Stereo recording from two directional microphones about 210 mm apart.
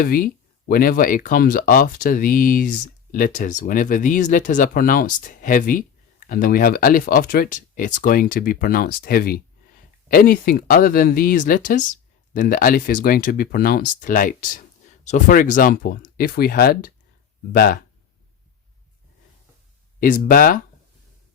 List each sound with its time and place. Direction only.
0.0 s speech: 45° left (ahead or behind)
20.0 s speech: 40° left (ahead or behind)